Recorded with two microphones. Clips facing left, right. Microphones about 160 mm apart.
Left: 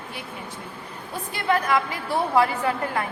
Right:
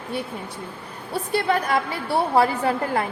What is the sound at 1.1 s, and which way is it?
A woman's voice, 35° right (ahead or behind).